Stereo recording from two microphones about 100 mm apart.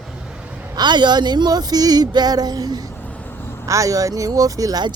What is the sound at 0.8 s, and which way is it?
Speech, 50° right (ahead or behind).